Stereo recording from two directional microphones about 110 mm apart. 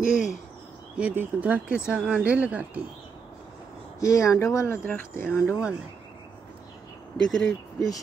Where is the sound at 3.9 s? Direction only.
30° left (ahead or behind).